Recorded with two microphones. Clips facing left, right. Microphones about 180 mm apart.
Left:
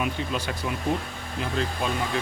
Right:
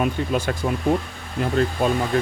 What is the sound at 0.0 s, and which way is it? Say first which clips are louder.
Speech: right 6 dB; 50° right (ahead or behind).